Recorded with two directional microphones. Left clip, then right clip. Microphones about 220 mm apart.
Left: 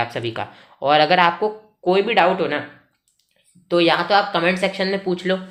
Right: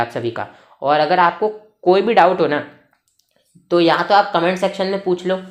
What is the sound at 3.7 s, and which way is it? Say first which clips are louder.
A woman's voice: right 2 dB; 15° right (ahead or behind).